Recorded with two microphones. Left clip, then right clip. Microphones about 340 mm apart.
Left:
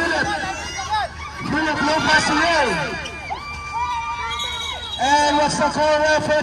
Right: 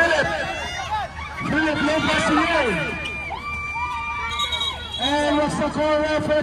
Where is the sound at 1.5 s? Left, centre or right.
Centre.